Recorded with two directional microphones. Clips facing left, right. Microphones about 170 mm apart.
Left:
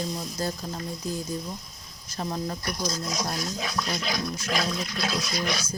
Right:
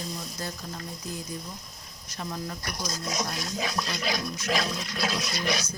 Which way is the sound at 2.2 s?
35° left (ahead or behind).